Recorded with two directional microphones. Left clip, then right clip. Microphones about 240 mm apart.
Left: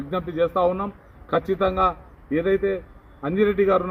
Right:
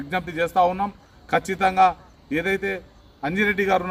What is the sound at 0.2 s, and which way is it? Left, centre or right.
A man's voice, centre.